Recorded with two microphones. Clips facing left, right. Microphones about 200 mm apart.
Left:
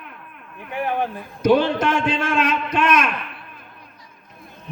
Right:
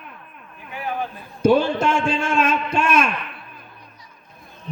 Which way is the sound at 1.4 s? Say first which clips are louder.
Even; 25° right (ahead or behind).